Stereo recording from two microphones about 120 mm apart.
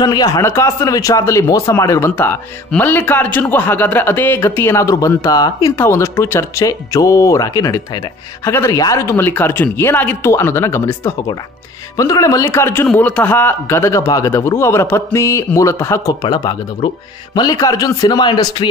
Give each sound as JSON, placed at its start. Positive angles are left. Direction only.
{"t": 0.0, "sound": "a man's voice", "side_deg": 35}
{"t": 0.4, "sound": "a man's voice", "side_deg": 20}
{"t": 8.5, "sound": "a man's voice", "side_deg": 20}